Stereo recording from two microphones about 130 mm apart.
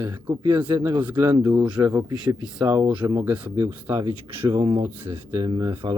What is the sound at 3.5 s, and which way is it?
Speech, 25° right (ahead or behind).